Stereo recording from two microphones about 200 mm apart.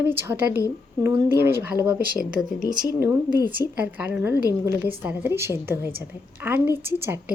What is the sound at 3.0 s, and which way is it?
A woman's voice, 10° right (ahead or behind).